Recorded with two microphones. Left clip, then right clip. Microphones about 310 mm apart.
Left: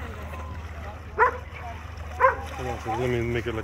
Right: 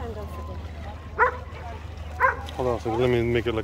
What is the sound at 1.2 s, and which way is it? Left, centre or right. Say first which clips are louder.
Dog: even; left.